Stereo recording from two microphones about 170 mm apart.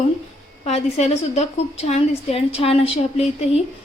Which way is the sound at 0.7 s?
40° left (ahead or behind).